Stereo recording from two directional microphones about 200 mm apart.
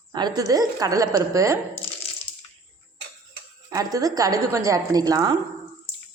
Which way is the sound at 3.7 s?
15° right (ahead or behind).